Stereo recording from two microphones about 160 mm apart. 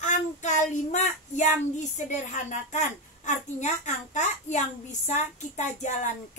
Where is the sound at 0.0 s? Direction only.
50° left (ahead or behind).